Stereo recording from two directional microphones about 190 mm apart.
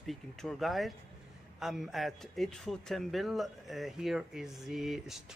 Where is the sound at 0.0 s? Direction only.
Centre (ahead or behind).